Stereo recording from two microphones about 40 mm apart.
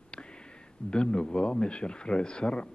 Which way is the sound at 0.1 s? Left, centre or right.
Left.